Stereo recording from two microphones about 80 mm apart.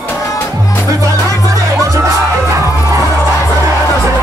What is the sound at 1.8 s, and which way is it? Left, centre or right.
Music, right.